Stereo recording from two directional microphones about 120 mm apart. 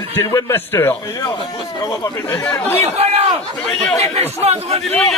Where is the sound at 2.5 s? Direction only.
20° left (ahead or behind).